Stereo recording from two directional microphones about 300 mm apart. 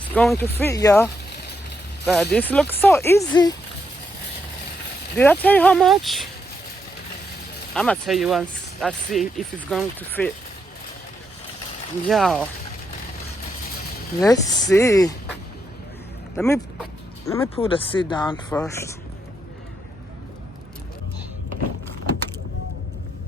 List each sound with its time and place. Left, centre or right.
0.1 s speech: centre
5.1 s speech: centre
7.8 s speech: centre
12.0 s speech: centre
14.3 s speech: centre
16.3 s speech: centre